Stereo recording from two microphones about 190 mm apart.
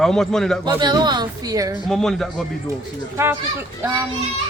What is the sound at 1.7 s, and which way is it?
Speech, centre (ahead or behind).